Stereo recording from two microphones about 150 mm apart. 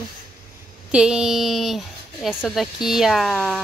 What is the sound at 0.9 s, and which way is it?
Speech, 5° right (ahead or behind).